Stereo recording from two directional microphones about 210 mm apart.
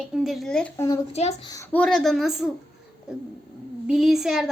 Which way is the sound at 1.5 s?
10° left (ahead or behind).